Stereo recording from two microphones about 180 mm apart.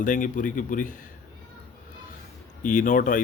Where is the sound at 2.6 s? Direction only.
45° left (ahead or behind).